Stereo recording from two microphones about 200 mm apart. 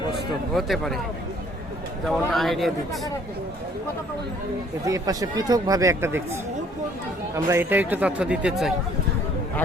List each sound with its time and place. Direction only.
0.5 s a man's voice: centre (ahead or behind)
2.0 s a man's voice: centre (ahead or behind)
4.9 s speech: 15° right (ahead or behind)
7.3 s speech: 10° right (ahead or behind)